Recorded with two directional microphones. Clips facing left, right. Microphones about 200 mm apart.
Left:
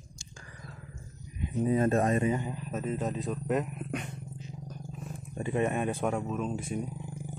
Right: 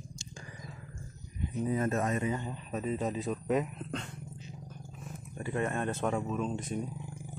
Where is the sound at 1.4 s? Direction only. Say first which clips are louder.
Left 4 dB; 25° left (ahead or behind).